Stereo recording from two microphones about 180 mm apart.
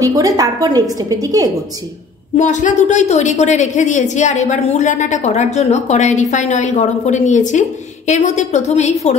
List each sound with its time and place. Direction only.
0.0 s a woman's voice: 20° right (ahead or behind)
2.3 s a woman's voice: 40° left (ahead or behind)